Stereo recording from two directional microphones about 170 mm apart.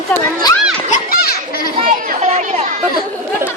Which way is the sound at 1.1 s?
60° left (ahead or behind).